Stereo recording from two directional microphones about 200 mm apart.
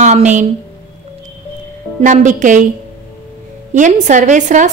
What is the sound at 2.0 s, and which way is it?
Speech, 40° right (ahead or behind).